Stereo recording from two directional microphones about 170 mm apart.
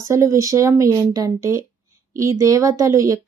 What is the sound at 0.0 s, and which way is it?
A woman's voice, 15° right (ahead or behind).